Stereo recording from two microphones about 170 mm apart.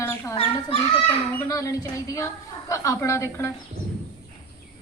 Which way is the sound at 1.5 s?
20° left (ahead or behind).